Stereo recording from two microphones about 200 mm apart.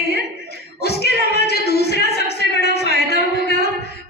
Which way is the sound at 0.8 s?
55° left (ahead or behind).